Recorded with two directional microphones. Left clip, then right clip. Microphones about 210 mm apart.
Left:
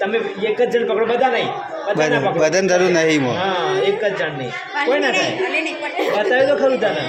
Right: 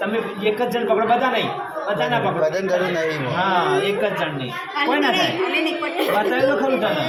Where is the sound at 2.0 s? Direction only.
55° left (ahead or behind).